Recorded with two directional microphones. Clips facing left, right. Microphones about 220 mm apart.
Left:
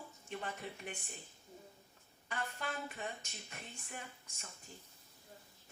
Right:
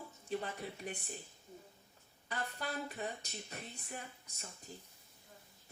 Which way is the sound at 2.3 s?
35° right (ahead or behind).